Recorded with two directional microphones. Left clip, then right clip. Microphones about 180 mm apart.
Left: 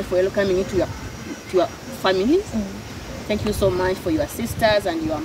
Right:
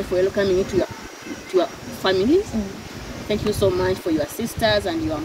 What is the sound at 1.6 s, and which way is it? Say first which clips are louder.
Speech: left 1 dB; centre (ahead or behind).